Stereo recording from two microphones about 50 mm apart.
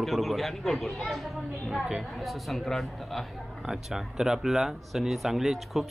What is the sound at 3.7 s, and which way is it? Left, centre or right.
Speech, centre.